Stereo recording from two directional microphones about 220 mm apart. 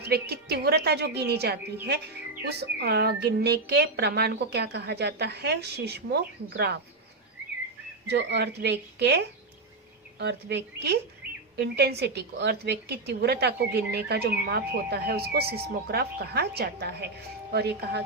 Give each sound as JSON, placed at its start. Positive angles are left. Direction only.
{"t": 0.1, "sound": "a woman's voice", "side_deg": -45}
{"t": 8.0, "sound": "a woman's voice", "side_deg": -50}